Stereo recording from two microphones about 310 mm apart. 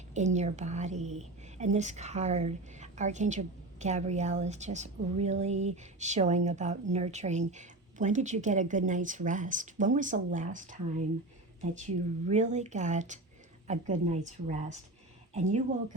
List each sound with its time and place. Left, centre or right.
0.1 s a woman's voice: right